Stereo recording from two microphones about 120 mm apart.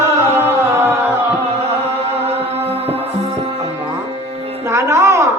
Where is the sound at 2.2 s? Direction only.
60° right (ahead or behind).